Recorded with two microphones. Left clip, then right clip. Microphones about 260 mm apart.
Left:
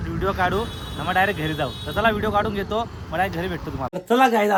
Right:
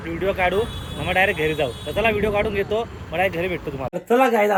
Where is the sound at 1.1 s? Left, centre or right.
Left.